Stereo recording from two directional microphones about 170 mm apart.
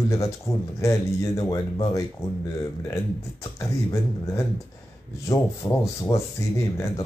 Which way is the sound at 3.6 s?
20° left (ahead or behind).